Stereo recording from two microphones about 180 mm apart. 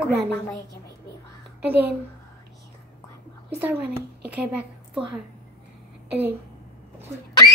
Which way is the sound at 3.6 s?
5° right (ahead or behind).